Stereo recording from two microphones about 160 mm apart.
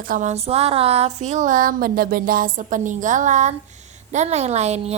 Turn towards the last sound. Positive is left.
turn(degrees=-45)  # may be behind; listen again after turning